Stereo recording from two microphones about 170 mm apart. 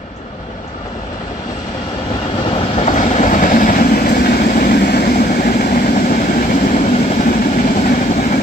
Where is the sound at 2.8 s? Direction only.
50° left (ahead or behind).